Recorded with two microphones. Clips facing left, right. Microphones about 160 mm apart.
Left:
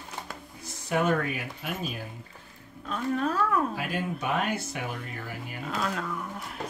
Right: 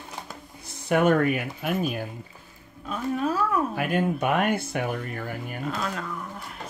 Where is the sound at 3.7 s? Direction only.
60° right (ahead or behind).